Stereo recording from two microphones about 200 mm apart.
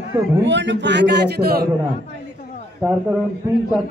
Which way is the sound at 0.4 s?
65° right (ahead or behind).